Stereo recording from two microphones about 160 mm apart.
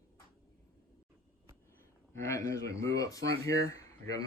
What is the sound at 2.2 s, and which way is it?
Speech, 20° left (ahead or behind).